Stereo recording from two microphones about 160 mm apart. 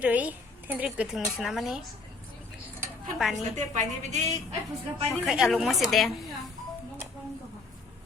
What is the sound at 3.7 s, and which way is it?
Speech, 45° right (ahead or behind).